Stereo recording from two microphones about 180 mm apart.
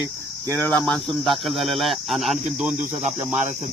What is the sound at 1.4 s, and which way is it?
Cricket, centre (ahead or behind).